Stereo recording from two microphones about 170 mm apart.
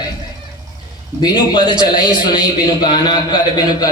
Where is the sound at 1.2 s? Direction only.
25° left (ahead or behind).